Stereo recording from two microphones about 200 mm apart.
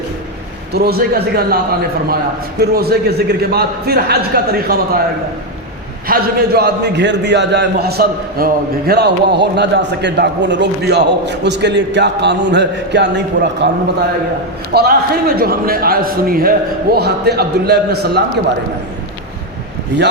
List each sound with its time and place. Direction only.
0.7 s a man's voice: 50° right (ahead or behind)
2.6 s a man's voice: 50° right (ahead or behind)
6.1 s a man's voice: 50° right (ahead or behind)
14.7 s a man's voice: 50° right (ahead or behind)